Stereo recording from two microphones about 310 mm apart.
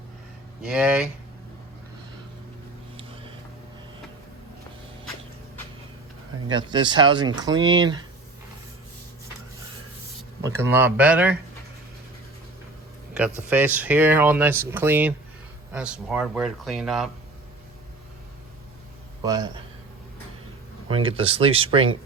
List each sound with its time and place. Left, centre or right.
0.6 s speech: centre
6.5 s speech: centre
10.4 s speech: centre
13.1 s speech: centre
19.2 s speech: centre
20.8 s speech: centre